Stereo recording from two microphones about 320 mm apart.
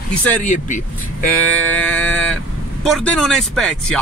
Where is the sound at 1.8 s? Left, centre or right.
Centre.